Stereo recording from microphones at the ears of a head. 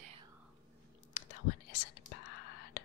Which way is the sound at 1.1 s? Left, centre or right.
Left.